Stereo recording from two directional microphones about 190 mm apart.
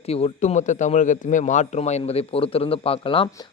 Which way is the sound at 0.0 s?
30° left (ahead or behind).